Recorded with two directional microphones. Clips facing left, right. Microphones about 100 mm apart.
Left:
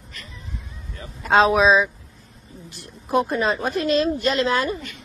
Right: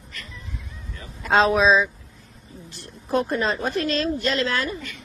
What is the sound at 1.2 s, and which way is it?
A woman's voice, centre (ahead or behind).